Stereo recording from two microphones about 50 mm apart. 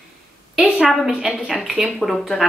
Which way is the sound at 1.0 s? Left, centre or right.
Centre.